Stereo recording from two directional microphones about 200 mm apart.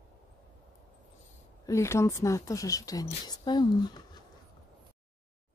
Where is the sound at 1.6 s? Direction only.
15° left (ahead or behind).